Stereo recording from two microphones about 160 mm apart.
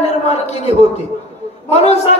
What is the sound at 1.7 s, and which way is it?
Speech, 40° left (ahead or behind).